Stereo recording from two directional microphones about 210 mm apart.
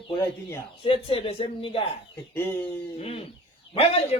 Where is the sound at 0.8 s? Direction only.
25° left (ahead or behind).